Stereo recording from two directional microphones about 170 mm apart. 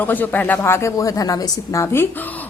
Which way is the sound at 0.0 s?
10° left (ahead or behind).